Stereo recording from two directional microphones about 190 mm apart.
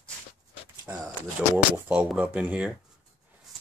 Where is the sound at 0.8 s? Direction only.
10° right (ahead or behind).